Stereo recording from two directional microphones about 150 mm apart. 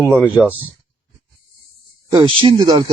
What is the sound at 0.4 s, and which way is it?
Speech, 5° right (ahead or behind).